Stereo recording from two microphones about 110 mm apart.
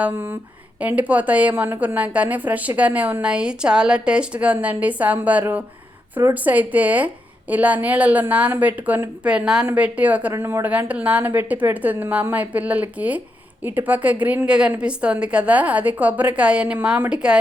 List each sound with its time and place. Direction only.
0.0 s a woman's voice: 20° right (ahead or behind)